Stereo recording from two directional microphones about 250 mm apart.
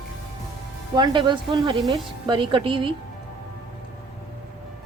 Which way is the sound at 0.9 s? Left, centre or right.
Centre.